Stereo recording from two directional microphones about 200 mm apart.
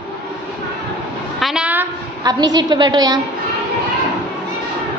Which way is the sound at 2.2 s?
20° right (ahead or behind).